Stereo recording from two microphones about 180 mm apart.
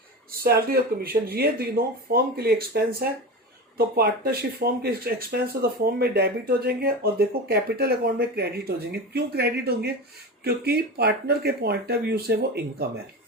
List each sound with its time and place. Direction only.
0.3 s speech: 60° right (ahead or behind)